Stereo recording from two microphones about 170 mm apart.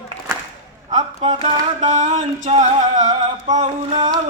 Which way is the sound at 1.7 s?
45° right (ahead or behind).